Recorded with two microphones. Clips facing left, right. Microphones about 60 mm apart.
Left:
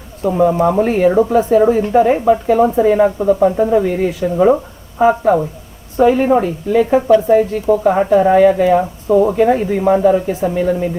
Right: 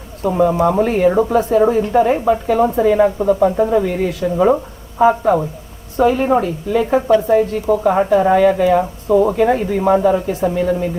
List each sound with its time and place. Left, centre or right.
0.2 s a woman's voice: centre
3.2 s a woman's voice: centre
4.4 s a sound: centre
5.0 s a woman's voice: centre
8.8 s speech: centre
9.8 s a woman's voice: centre
10.5 s speech: centre